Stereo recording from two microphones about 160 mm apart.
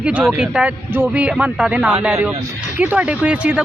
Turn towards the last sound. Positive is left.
turn(degrees=-10)  # may be behind; listen again after turning